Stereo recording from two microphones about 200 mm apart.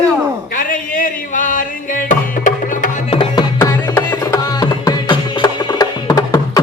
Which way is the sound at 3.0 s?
25° left (ahead or behind).